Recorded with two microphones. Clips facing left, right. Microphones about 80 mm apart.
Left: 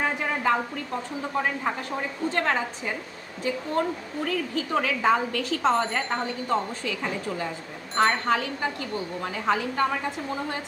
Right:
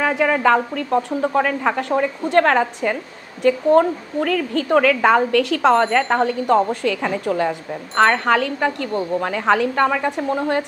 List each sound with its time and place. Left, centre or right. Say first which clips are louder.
0.1 s a woman's voice: right 9 dB; right